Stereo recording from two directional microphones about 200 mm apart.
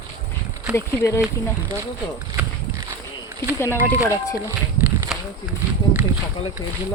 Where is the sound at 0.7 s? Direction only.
15° left (ahead or behind).